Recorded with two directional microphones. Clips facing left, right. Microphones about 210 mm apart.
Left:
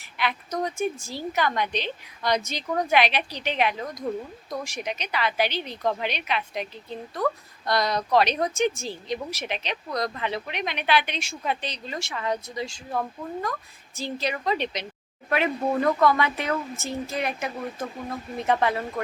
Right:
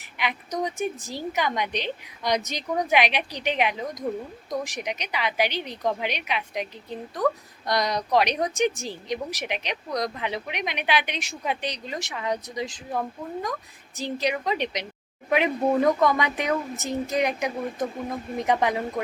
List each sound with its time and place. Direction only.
0.0 s a woman's voice: 15° right (ahead or behind)